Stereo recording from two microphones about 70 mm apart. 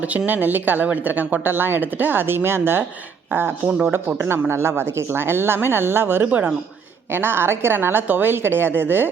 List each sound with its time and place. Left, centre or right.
0.0 s speech: right
3.7 s speech: centre
3.9 s speech: right